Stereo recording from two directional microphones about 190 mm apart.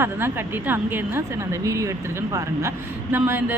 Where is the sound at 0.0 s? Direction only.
10° right (ahead or behind).